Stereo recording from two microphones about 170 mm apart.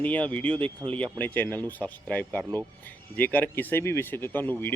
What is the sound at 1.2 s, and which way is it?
Speech, 10° left (ahead or behind).